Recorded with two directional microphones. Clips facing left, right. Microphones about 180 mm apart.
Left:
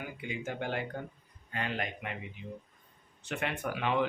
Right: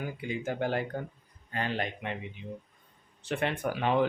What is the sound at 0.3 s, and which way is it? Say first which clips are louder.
Speech: right 5 dB; 40° right (ahead or behind).